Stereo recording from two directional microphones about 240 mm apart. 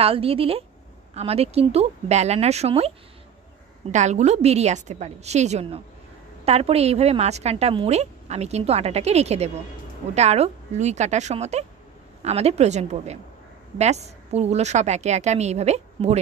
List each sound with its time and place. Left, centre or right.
0.0 s a woman's voice: right
3.9 s a woman's voice: right